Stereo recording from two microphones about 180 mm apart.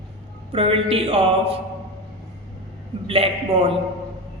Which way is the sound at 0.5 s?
30° right (ahead or behind).